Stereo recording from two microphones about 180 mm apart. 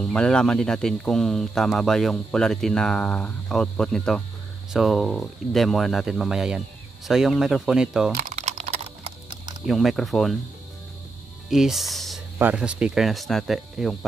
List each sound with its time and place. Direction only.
0.0 s speech: 5° left (ahead or behind)
8.2 s typing: 45° right (ahead or behind)
9.7 s speech: centre (ahead or behind)
11.4 s speech: centre (ahead or behind)